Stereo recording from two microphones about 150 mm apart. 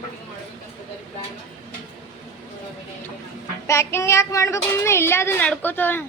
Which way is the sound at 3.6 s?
20° left (ahead or behind).